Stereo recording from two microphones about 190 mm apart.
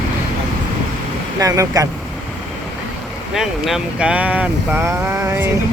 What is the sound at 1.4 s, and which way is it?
Speech, 20° right (ahead or behind).